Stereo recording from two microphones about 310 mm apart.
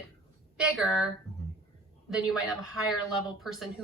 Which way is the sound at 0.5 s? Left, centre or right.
Centre.